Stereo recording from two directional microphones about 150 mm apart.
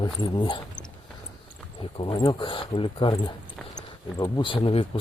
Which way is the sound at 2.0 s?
30° left (ahead or behind).